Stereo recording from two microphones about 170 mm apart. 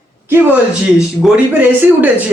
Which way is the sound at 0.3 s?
10° right (ahead or behind).